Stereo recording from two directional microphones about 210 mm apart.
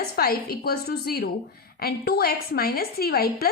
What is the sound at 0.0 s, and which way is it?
A woman's voice, 45° left (ahead or behind).